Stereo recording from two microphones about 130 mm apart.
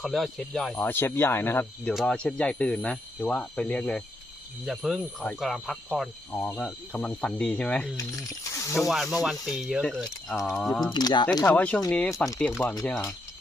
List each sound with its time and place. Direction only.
0.0 s speech: centre (ahead or behind)
0.9 s speech: 15° left (ahead or behind)
1.9 s speech: centre (ahead or behind)
4.6 s speech: centre (ahead or behind)
7.9 s speech: 25° left (ahead or behind)
8.9 s speech: centre (ahead or behind)
10.9 s speech: 35° left (ahead or behind)
11.4 s speech: 10° left (ahead or behind)